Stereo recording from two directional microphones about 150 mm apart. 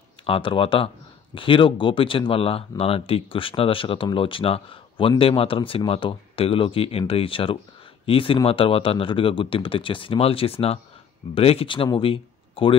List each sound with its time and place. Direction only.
0.3 s speech: 35° left (ahead or behind)